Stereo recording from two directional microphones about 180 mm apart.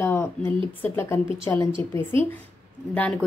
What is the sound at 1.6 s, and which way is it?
Speech, 30° right (ahead or behind).